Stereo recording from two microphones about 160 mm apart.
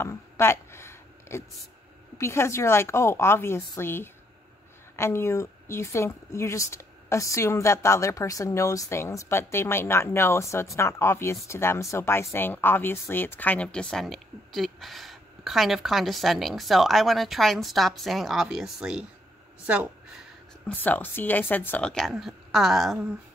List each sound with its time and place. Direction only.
0.0 s a sound: 15° left (ahead or behind)
2.1 s a woman's voice: 15° left (ahead or behind); by 20.2 s 5° right (ahead or behind)
20.6 s a woman's voice: 10° left (ahead or behind)